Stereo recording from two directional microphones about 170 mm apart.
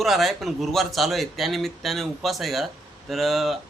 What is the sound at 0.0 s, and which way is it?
Speech, centre (ahead or behind).